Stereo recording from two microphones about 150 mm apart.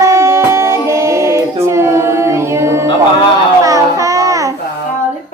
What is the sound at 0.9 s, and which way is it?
Female singing, 20° right (ahead or behind).